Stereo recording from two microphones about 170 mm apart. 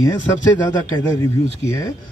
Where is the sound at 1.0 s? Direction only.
15° left (ahead or behind).